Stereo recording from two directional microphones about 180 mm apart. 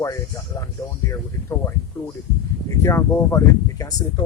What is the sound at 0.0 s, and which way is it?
Speech, 20° left (ahead or behind).